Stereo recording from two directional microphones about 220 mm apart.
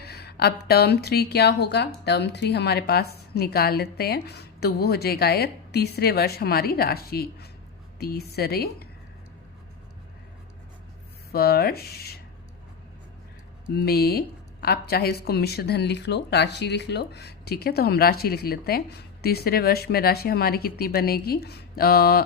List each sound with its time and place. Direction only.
0.0 s speech: 45° left (ahead or behind)
11.3 s speech: 45° left (ahead or behind)
13.7 s speech: 45° left (ahead or behind)